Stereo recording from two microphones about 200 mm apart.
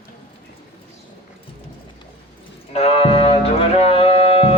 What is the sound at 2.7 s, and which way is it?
Music, 30° left (ahead or behind).